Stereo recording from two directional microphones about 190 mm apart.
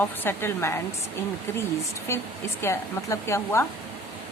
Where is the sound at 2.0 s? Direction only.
15° left (ahead or behind).